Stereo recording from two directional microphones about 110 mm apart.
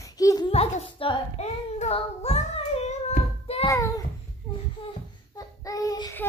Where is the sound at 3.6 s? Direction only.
30° left (ahead or behind).